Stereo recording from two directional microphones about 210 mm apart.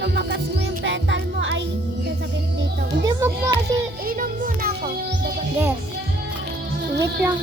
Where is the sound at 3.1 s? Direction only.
15° right (ahead or behind).